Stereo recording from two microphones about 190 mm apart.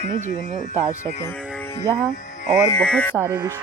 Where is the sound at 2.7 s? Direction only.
5° left (ahead or behind).